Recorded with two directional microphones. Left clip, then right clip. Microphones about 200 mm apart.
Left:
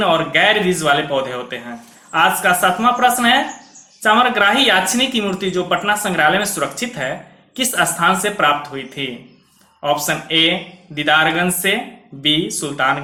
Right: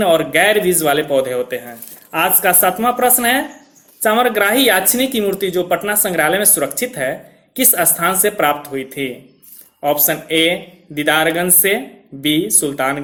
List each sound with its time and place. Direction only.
0.0 s speech: 45° right (ahead or behind)